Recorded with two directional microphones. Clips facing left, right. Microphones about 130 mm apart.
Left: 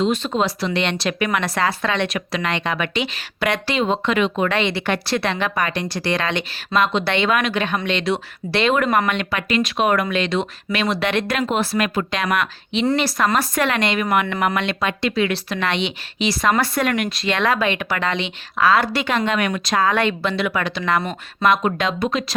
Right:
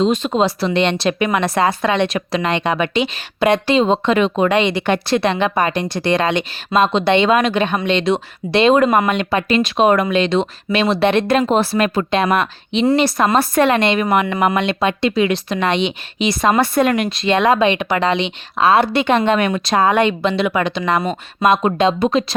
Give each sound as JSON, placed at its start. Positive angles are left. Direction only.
{"t": 0.0, "sound": "speech", "side_deg": -20}
{"t": 4.4, "sound": "speech", "side_deg": -20}
{"t": 9.3, "sound": "speech", "side_deg": -30}